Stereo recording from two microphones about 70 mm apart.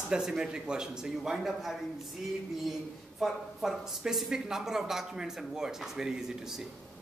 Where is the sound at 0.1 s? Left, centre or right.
Centre.